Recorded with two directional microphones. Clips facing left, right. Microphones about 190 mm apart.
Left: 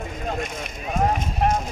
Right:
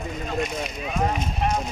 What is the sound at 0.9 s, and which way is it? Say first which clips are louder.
Speech: left 3 dB; 50° left (ahead or behind).